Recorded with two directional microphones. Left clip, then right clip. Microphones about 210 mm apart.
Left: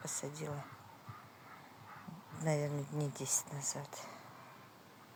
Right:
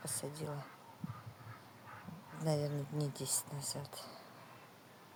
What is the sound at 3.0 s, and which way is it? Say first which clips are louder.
Speech: even; 30° left (ahead or behind).